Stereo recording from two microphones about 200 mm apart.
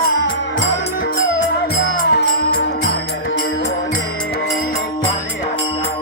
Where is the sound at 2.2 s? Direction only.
55° left (ahead or behind).